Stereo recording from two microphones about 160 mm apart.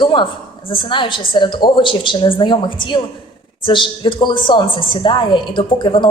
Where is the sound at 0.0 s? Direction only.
30° left (ahead or behind).